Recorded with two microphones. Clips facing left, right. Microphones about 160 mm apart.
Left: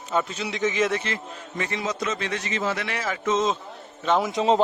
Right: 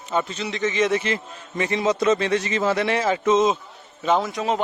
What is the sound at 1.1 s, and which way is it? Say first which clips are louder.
A man's voice: right 4 dB; 20° right (ahead or behind).